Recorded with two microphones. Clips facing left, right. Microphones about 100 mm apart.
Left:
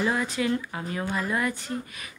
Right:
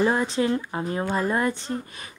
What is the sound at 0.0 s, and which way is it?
Speech, 30° right (ahead or behind).